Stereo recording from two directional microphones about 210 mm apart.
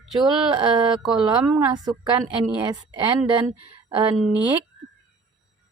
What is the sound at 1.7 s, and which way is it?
Speech, 20° right (ahead or behind).